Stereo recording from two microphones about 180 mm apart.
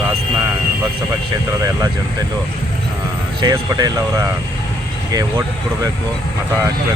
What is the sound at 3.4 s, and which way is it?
Speech, 20° right (ahead or behind).